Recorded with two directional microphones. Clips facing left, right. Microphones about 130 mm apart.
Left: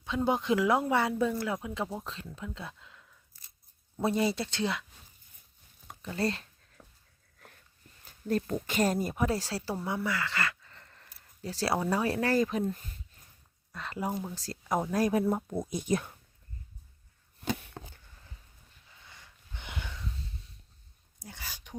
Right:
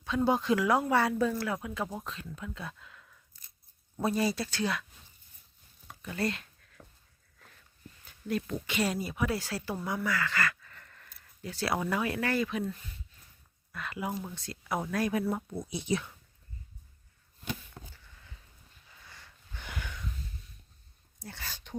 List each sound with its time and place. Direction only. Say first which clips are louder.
0.0 s speech: right 1 dB; 20° left (ahead or behind)
4.0 s speech: left 1 dB; 25° left (ahead or behind)
6.0 s speech: left 1 dB; 30° left (ahead or behind)
8.0 s speech: left 3 dB; 40° left (ahead or behind)
9.2 s speech: right 1 dB; 35° left (ahead or behind)
9.8 s a sound: right 2 dB; 25° left (ahead or behind)
11.9 s speech: left 3 dB; 35° left (ahead or behind)
14.1 s speech: left 2 dB; 5° left (ahead or behind)
14.3 s speech: left 3 dB; 35° left (ahead or behind)
15.2 s speech: left 3 dB; 20° left (ahead or behind)
15.7 s speech: left 1 dB; 45° left (ahead or behind)
17.4 s a sound: left 5 dB; 75° left (ahead or behind)
19.0 s a sound: right 1 dB; 20° left (ahead or behind)
21.2 s a sound: right 2 dB; 15° left (ahead or behind)